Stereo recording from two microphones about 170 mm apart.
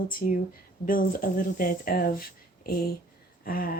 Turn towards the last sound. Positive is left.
turn(degrees=60)  # may be behind; listen again after turning